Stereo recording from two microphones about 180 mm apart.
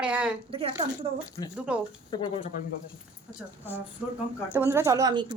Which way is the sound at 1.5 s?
5° right (ahead or behind).